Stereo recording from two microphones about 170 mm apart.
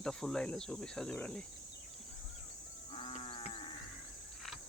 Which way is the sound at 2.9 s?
35° left (ahead or behind).